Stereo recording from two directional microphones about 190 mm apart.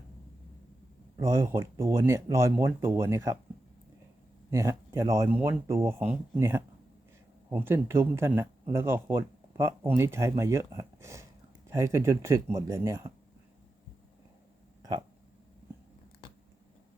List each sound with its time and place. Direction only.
1.2 s speech: 15° right (ahead or behind)
4.5 s speech: 15° right (ahead or behind)